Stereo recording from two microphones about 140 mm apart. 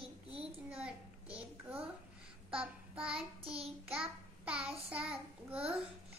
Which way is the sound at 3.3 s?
40° right (ahead or behind).